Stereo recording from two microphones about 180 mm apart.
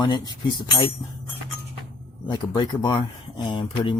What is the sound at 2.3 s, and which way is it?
Speech, 25° left (ahead or behind).